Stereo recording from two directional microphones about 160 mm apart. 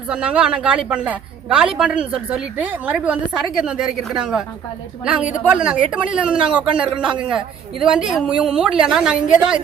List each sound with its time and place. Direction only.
0.1 s a woman's voice: 5° right (ahead or behind)
5.5 s speech: 5° right (ahead or behind)